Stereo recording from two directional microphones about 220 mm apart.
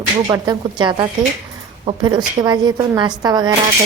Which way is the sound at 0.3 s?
20° right (ahead or behind).